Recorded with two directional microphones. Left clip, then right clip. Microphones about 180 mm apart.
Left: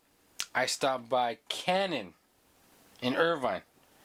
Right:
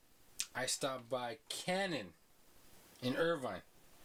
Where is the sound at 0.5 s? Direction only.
15° left (ahead or behind).